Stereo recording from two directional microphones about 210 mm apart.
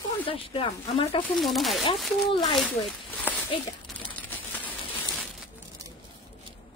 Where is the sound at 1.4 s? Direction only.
Centre (ahead or behind).